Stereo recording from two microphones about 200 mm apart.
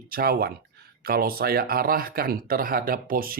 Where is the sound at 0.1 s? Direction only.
50° right (ahead or behind).